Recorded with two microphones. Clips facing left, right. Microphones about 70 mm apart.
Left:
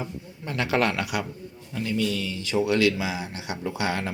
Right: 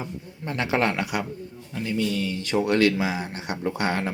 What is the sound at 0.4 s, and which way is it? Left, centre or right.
Speech, right.